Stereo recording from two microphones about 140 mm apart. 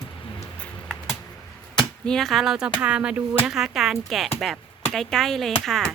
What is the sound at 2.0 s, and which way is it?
Speech, 5° left (ahead or behind).